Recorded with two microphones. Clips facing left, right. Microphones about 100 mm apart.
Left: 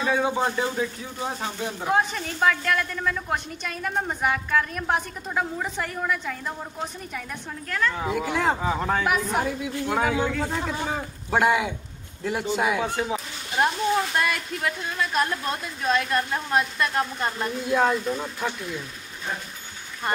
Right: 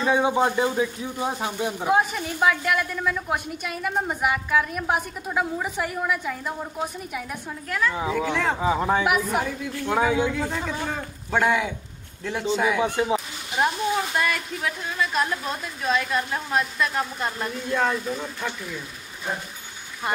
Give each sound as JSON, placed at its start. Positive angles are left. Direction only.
{"t": 0.1, "sound": "speech", "side_deg": -15}
{"t": 8.1, "sound": "speech", "side_deg": 5}
{"t": 8.5, "sound": "speech", "side_deg": -10}
{"t": 9.4, "sound": "a man's voice", "side_deg": 5}